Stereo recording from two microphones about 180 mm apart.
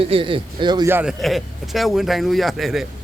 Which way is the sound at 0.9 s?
10° right (ahead or behind).